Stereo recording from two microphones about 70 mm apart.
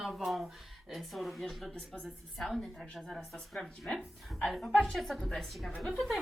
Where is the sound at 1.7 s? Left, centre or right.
Centre.